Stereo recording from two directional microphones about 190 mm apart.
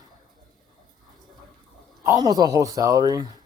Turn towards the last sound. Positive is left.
turn(degrees=-20)  # may be behind; listen again after turning